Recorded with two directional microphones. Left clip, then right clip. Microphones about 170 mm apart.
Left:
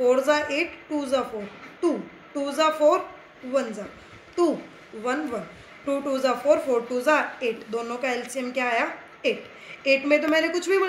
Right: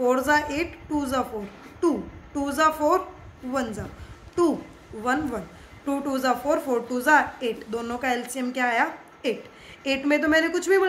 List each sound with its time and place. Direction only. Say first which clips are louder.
0.0 s a woman's voice: left 1 dB; 35° right (ahead or behind)
5.0 s a woman's voice: right 1 dB; 35° right (ahead or behind)